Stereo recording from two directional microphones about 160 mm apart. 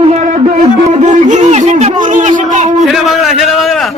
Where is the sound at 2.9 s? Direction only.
Centre (ahead or behind).